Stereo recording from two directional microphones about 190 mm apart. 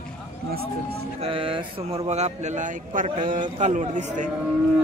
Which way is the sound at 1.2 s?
30° right (ahead or behind).